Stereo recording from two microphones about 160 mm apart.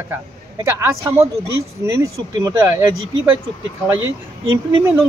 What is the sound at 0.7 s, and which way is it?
Speech, 15° right (ahead or behind).